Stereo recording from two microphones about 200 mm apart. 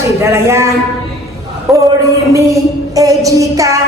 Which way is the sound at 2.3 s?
15° right (ahead or behind).